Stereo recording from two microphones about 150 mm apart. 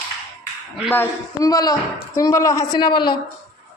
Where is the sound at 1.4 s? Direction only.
25° left (ahead or behind).